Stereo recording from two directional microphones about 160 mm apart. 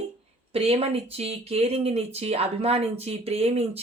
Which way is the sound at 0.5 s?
35° right (ahead or behind).